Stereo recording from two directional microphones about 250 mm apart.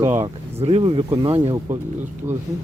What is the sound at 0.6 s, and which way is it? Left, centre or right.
Speech, right.